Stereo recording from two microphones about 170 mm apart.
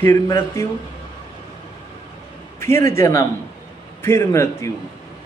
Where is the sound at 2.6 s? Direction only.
15° left (ahead or behind).